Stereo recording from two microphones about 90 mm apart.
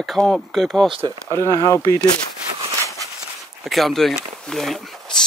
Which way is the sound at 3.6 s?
Centre (ahead or behind).